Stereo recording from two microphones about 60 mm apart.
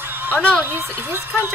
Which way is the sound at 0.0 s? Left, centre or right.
Right.